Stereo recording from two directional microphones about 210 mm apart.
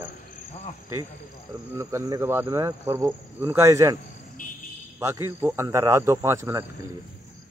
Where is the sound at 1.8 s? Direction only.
15° right (ahead or behind).